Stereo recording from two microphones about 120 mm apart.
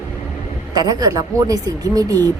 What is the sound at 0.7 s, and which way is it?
A woman's voice, 35° right (ahead or behind).